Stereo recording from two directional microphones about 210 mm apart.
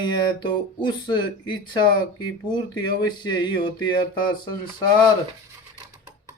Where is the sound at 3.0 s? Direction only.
20° left (ahead or behind).